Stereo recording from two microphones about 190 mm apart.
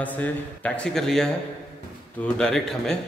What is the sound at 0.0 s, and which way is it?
A man's voice, 10° left (ahead or behind).